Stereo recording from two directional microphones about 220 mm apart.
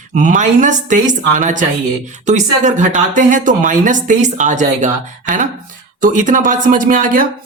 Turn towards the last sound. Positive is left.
turn(degrees=-40)  # may be behind; listen again after turning